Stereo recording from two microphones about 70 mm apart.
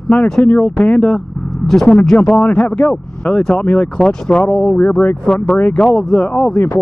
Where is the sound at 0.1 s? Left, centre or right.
Centre.